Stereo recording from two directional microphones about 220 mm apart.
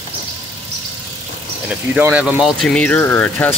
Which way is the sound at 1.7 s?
5° right (ahead or behind).